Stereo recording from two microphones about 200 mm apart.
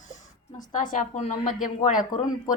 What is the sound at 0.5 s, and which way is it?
A woman's voice, 40° left (ahead or behind).